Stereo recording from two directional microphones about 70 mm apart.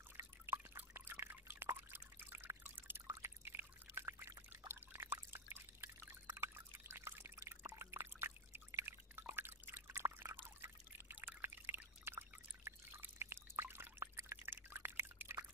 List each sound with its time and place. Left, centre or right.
0.2 s drip: right
3.1 s pour: right
4.5 s drip: right
10.6 s pour: right